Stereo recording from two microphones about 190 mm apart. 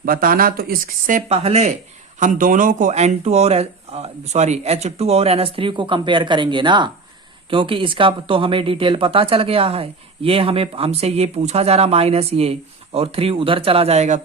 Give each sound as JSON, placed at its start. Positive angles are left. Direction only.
{"t": 0.0, "sound": "speech", "side_deg": -50}